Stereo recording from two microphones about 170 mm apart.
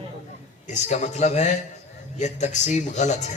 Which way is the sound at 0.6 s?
45° left (ahead or behind).